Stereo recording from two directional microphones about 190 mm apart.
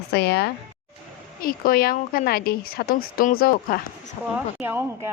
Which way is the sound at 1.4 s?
50° left (ahead or behind).